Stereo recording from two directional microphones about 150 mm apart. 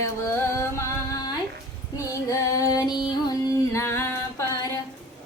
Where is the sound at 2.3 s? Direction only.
20° left (ahead or behind).